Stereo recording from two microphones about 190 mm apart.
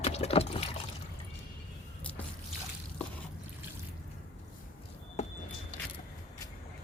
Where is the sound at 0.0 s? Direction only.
35° left (ahead or behind).